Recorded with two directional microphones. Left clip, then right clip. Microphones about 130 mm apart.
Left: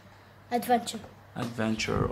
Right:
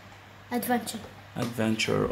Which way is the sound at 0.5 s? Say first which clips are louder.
Left 3 dB; 85° left.